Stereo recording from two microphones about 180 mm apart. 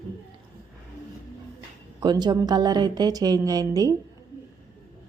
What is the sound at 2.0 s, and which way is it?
Speech, 25° right (ahead or behind).